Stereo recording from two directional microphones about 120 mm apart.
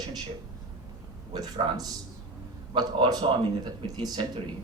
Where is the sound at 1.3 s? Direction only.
35° right (ahead or behind).